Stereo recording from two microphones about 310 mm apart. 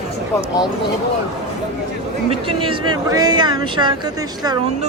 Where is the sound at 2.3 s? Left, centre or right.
Centre.